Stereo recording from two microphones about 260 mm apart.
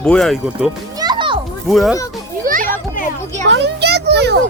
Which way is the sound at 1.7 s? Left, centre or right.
Centre.